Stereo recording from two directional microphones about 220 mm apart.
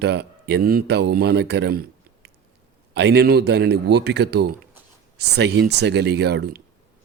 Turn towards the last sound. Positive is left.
turn(degrees=-50)  # may be behind; listen again after turning